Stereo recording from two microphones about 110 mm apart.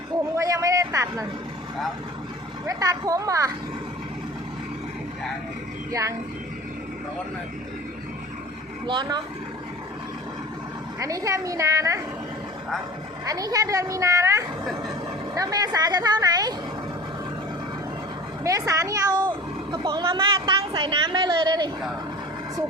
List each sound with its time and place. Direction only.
0.3 s a sound: 30° right (ahead or behind)
2.6 s speech: 30° right (ahead or behind)
5.9 s a child's voice: 30° right (ahead or behind)
8.9 s a woman's voice: 45° right (ahead or behind)
11.0 s a child's voice: 30° right (ahead or behind)
13.2 s a child's voice: 35° right (ahead or behind)
18.4 s a woman's voice: 30° right (ahead or behind)